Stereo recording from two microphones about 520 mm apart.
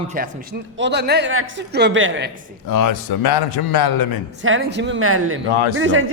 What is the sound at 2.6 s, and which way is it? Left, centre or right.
A man's voice, left.